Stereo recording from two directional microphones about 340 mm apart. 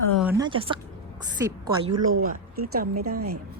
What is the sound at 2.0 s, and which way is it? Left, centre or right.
Speech, right.